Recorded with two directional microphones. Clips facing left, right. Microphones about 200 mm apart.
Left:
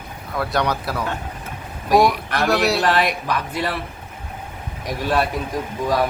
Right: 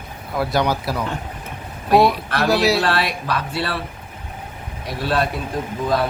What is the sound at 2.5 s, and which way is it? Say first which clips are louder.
Speech: right 2 dB; centre (ahead or behind).